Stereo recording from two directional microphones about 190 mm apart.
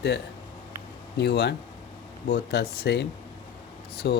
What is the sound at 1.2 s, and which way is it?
Speech, 60° left (ahead or behind).